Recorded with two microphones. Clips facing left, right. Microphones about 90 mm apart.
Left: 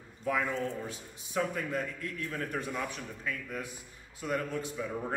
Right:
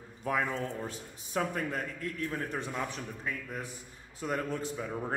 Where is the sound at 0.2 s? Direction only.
40° right (ahead or behind).